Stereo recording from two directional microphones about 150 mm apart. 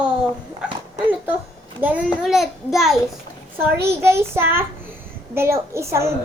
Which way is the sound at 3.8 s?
15° right (ahead or behind).